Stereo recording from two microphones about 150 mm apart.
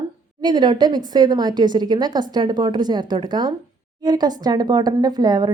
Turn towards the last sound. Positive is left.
turn(degrees=-25)  # may be behind; listen again after turning